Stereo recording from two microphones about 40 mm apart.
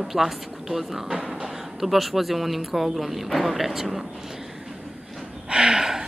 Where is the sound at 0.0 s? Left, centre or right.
Centre.